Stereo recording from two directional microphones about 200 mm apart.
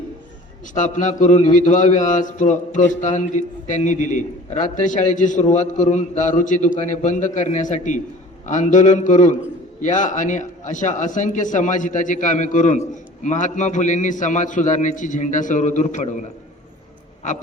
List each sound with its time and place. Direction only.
0.7 s a man's voice: 40° left (ahead or behind)